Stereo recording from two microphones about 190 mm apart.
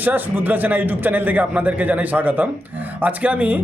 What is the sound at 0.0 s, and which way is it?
A man's voice, 10° right (ahead or behind).